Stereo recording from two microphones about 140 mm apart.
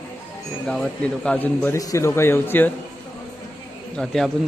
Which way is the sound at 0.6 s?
5° left (ahead or behind).